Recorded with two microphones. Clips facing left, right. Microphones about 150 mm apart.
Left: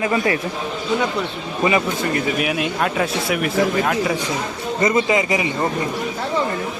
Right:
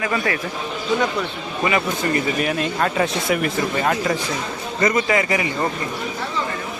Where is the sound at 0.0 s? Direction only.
25° left (ahead or behind).